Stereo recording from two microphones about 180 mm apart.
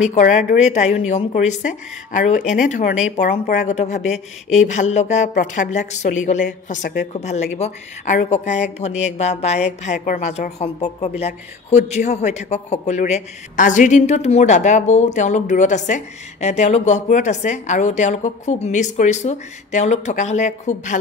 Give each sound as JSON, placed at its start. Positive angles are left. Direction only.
{"t": 0.0, "sound": "a woman's voice", "side_deg": 40}